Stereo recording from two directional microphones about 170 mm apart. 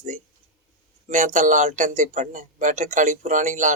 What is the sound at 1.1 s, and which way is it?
Speech, 45° right (ahead or behind).